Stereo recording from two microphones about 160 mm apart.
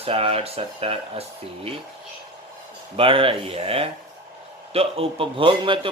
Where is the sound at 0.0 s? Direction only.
35° right (ahead or behind).